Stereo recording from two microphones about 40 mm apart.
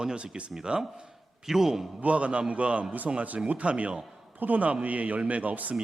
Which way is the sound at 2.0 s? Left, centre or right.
Right.